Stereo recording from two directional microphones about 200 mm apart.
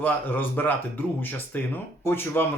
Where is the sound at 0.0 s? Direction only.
10° left (ahead or behind).